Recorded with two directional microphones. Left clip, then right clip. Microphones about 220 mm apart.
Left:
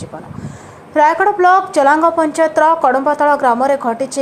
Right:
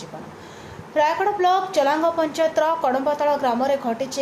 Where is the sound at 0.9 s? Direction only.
25° left (ahead or behind).